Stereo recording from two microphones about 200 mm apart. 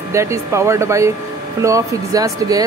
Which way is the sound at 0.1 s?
15° right (ahead or behind).